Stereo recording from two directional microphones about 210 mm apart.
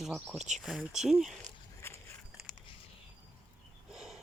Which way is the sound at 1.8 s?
10° left (ahead or behind).